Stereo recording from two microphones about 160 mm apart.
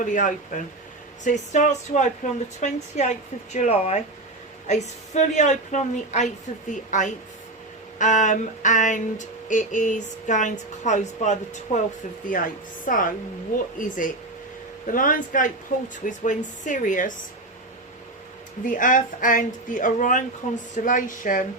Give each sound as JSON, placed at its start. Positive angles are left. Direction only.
{"t": 0.0, "sound": "speech", "side_deg": 55}
{"t": 12.8, "sound": "speech", "side_deg": 60}
{"t": 18.6, "sound": "speech", "side_deg": 55}